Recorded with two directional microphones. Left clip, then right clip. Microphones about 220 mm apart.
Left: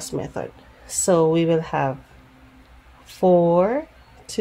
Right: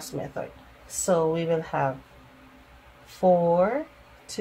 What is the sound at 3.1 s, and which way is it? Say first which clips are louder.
Speech: left 4 dB; 40° left (ahead or behind).